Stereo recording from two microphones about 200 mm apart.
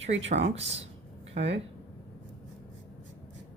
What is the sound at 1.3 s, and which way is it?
Speech, 60° right (ahead or behind).